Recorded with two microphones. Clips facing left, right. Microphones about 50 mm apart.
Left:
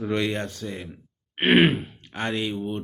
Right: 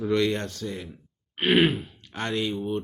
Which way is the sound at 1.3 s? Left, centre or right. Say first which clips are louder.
Left 3 dB; left.